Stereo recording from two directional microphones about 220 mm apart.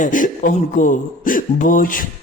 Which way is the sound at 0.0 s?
35° left (ahead or behind).